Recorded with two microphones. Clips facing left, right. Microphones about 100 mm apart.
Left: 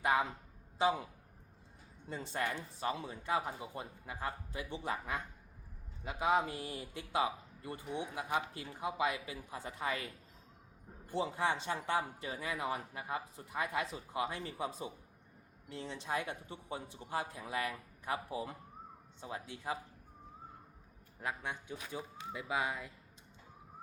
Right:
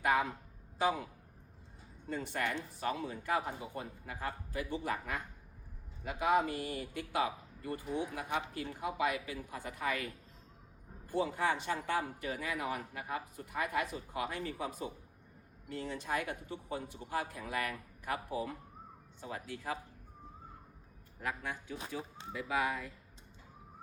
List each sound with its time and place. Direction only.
0.0 s a sound: 25° left (ahead or behind)
0.8 s speech: 25° left (ahead or behind)
2.0 s speech: 25° left (ahead or behind)
19.2 s speech: 25° left (ahead or behind)
21.2 s speech: 20° left (ahead or behind)